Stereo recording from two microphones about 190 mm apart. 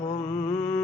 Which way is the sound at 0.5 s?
5° left (ahead or behind).